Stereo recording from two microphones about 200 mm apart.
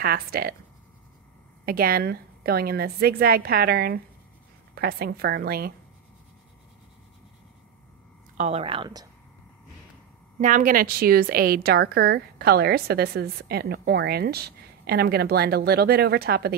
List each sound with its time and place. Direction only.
0.0 s a woman's voice: 50° right (ahead or behind)
1.7 s a woman's voice: 50° right (ahead or behind)
8.4 s speech: 30° right (ahead or behind)
10.4 s a woman's voice: 40° right (ahead or behind)